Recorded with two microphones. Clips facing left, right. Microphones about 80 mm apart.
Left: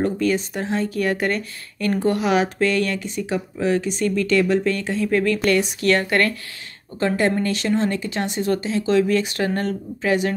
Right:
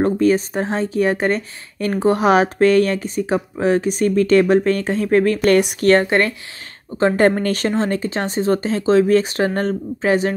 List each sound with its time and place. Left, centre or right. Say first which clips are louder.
0.0 s speech: right 5 dB; right
2.1 s speech: right 5 dB; right
7.2 s speech: right 4 dB; right